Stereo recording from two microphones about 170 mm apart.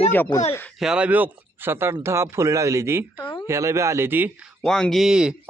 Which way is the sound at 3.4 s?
15° right (ahead or behind).